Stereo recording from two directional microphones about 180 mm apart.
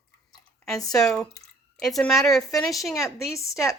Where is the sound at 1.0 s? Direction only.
5° left (ahead or behind).